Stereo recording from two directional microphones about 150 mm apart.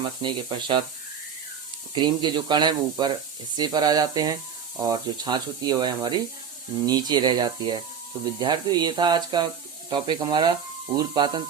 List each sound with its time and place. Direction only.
0.2 s speech: 30° right (ahead or behind)
2.0 s speech: 30° right (ahead or behind)